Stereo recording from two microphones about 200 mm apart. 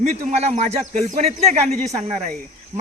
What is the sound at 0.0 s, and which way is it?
Speech, 35° right (ahead or behind).